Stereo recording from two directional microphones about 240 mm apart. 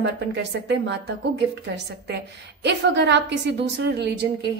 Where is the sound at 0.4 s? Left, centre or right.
Right.